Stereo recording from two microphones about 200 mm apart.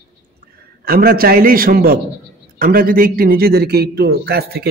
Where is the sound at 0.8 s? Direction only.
50° right (ahead or behind).